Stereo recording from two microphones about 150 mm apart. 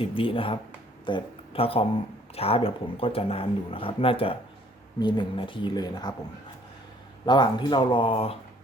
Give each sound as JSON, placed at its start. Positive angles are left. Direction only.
{"t": 0.0, "sound": "speech", "side_deg": 35}
{"t": 7.3, "sound": "speech", "side_deg": 30}